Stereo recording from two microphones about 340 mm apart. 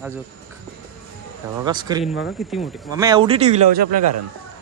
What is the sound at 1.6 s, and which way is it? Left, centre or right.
Speech, centre.